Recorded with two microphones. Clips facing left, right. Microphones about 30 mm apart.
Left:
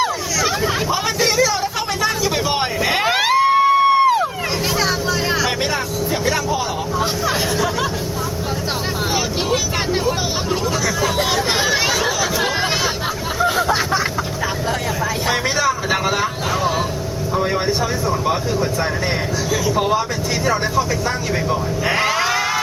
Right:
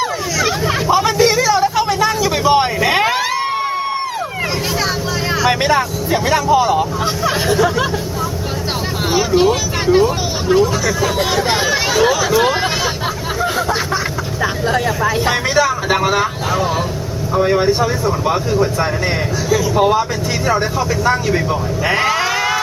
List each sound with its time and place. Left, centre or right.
0.9 s vehicle: centre
3.1 s a sound: left
5.5 s vehicle: centre
9.1 s vehicle: centre
12.2 s a sound: centre
15.3 s vehicle: centre
17.3 s speech: centre